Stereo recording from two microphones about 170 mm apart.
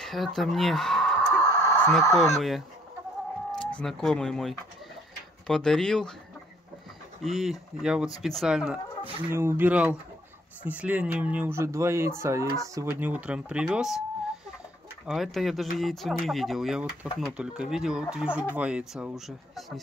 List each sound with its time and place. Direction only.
0.0 s speech: centre (ahead or behind)
1.4 s a sound: 20° left (ahead or behind)
2.1 s speech: centre (ahead or behind)
7.2 s speech: centre (ahead or behind)
15.0 s speech: centre (ahead or behind)